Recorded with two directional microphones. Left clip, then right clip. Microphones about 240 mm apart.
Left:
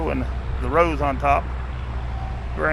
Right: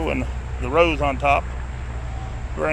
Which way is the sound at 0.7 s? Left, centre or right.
Centre.